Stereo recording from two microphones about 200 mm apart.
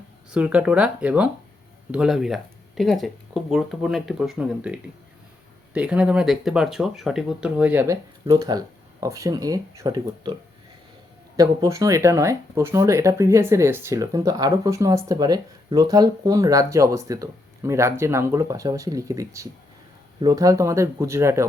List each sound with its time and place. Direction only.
0.3 s speech: 5° right (ahead or behind)
11.3 s speech: 15° right (ahead or behind)